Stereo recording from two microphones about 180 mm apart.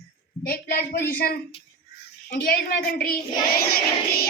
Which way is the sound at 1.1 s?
55° left (ahead or behind).